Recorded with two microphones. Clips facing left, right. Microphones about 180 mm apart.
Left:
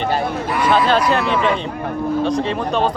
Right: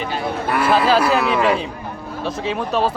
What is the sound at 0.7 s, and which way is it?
Speech, 5° right (ahead or behind).